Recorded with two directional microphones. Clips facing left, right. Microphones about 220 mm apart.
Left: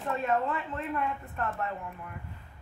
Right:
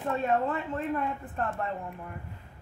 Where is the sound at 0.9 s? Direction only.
30° right (ahead or behind).